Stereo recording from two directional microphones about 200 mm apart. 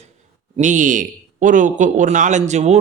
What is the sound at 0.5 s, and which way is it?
Speech, 40° right (ahead or behind).